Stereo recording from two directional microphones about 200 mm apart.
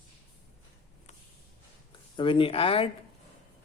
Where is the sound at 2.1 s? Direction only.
25° left (ahead or behind).